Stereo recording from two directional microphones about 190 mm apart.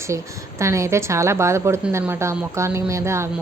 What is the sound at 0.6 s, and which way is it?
A woman's voice, 15° right (ahead or behind).